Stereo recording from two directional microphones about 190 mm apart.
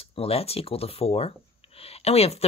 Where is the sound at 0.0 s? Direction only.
30° left (ahead or behind).